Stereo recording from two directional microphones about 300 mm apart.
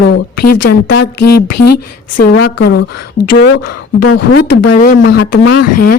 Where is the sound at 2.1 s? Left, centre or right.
Left.